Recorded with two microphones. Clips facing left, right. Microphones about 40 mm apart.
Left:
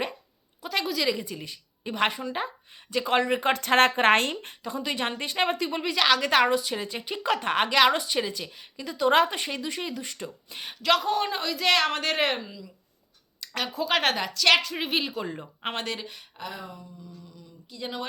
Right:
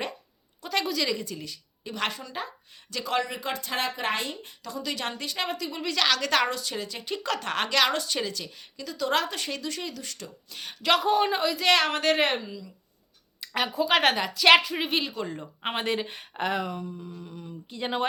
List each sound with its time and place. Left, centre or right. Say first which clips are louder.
0.6 s a woman's voice: left 1 dB; centre; by 3.5 s left
3.5 s speech: left 10 dB; left
4.6 s a woman's voice: left 2 dB; left
5.8 s a woman's voice: left 2 dB; centre
10.8 s speech: right 1 dB; centre
13.4 s speech: right 3 dB; centre
14.8 s speech: even; centre
15.8 s speech: right 9 dB; right
16.0 s speech: right 2 dB; right
16.4 s speech: right 10 dB; right
17.7 s speech: right 4 dB; right